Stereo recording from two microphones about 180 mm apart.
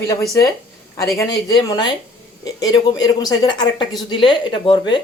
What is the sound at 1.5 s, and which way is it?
Speech, 25° left (ahead or behind).